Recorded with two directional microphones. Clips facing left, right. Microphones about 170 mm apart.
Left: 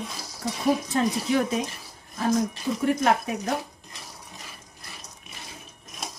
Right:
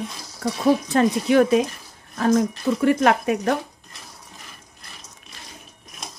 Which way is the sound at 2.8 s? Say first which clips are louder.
Right 4 dB; 80° right.